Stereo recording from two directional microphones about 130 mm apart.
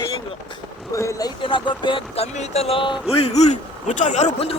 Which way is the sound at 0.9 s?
25° left (ahead or behind).